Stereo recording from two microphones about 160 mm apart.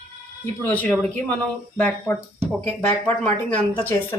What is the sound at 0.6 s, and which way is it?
A woman's voice, 10° left (ahead or behind).